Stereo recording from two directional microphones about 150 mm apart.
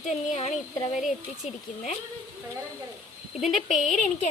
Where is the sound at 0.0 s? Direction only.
50° left (ahead or behind).